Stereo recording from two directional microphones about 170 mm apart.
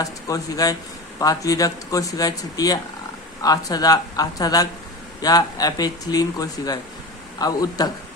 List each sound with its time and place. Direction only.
0.0 s speech: 20° left (ahead or behind)